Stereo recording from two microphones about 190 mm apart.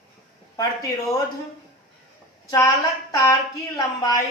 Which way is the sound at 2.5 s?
20° left (ahead or behind).